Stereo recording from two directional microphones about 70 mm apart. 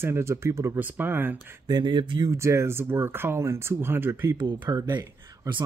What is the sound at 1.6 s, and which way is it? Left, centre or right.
Speech, right.